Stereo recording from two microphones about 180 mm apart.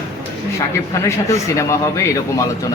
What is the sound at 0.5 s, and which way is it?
Speech, 15° left (ahead or behind).